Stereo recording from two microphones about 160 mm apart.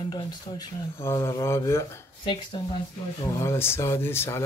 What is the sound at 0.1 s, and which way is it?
Speech, 25° left (ahead or behind).